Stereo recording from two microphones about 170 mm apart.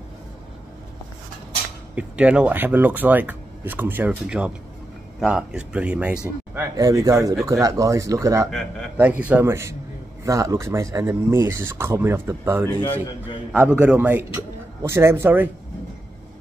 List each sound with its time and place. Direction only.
2.0 s speech: 5° right (ahead or behind)
6.8 s speech: 20° right (ahead or behind)
8.5 s a man's voice: 5° left (ahead or behind)
8.9 s speech: 10° right (ahead or behind)